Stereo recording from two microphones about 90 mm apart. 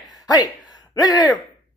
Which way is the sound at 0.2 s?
50° left (ahead or behind).